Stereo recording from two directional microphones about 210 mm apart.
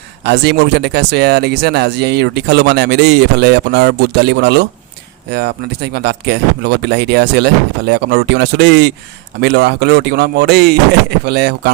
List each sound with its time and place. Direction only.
0.3 s speech: 50° right (ahead or behind)